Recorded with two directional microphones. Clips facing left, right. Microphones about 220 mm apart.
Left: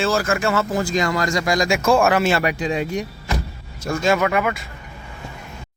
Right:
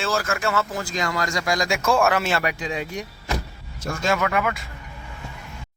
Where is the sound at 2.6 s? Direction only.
30° left (ahead or behind).